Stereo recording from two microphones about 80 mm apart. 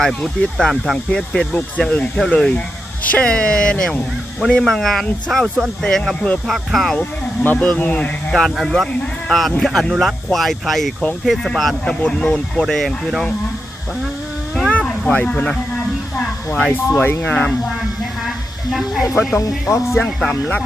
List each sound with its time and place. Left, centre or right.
0.0 s speech: centre
3.0 s speech: centre
7.4 s speech: left
8.3 s speech: centre
14.7 s a sound: centre
16.7 s speech: left
18.7 s speech: centre
19.4 s speech: left
20.1 s speech: centre